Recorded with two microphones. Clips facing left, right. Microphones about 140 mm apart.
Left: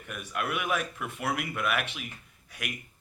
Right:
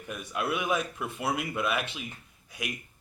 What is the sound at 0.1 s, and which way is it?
Speech, 25° right (ahead or behind).